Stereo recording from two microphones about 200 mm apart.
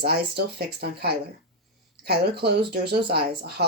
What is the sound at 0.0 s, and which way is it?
Speech, 55° right (ahead or behind).